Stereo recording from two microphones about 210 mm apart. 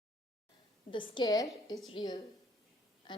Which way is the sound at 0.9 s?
25° left (ahead or behind).